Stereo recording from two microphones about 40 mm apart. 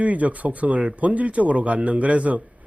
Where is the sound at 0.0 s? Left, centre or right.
Right.